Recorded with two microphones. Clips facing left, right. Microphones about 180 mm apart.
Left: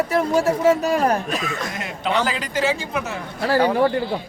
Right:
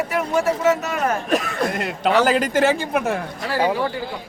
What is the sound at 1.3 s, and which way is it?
Speech, 60° right (ahead or behind).